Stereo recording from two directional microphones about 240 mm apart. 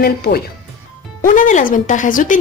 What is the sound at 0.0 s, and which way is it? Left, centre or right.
Speech, left.